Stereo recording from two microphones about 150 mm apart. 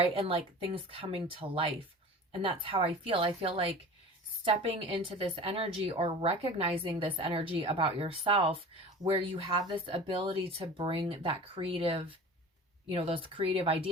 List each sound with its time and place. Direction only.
0.0 s a woman's voice: 40° right (ahead or behind)